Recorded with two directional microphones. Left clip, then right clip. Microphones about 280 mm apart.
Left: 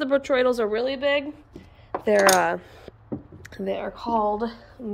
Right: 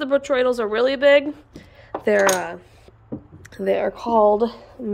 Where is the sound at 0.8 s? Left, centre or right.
Centre.